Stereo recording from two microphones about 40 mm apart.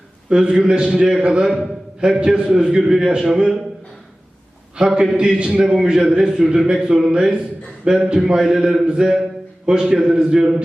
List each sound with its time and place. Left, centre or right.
0.3 s a man's voice: right
1.5 s a man's voice: centre
4.8 s a man's voice: centre